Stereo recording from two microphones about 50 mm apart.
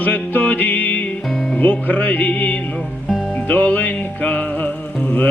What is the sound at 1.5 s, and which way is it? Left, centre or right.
Music, left.